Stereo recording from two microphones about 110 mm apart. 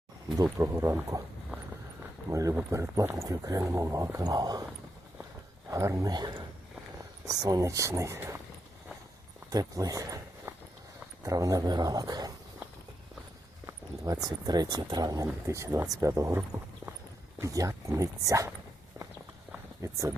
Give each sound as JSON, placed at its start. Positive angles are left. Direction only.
{"t": 0.4, "sound": "speech", "side_deg": -25}
{"t": 2.3, "sound": "speech", "side_deg": -30}
{"t": 5.7, "sound": "speech", "side_deg": -30}
{"t": 9.5, "sound": "a sound", "side_deg": -35}
{"t": 11.2, "sound": "speech", "side_deg": -30}
{"t": 13.7, "sound": "a sound", "side_deg": -30}
{"t": 14.3, "sound": "speech", "side_deg": -35}
{"t": 19.8, "sound": "speech", "side_deg": -25}